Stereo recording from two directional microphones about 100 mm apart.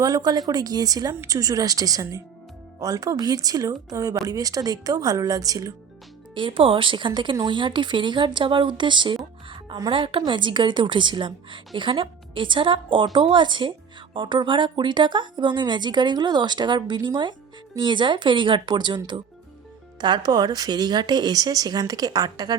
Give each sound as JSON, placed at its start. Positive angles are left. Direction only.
{"t": 0.0, "sound": "a woman's voice", "side_deg": -40}
{"t": 6.3, "sound": "a woman's voice", "side_deg": -55}